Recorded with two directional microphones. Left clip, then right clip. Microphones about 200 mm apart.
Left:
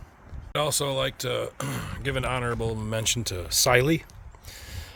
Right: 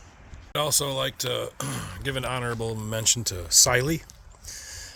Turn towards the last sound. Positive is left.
turn(degrees=25)  # may be behind; listen again after turning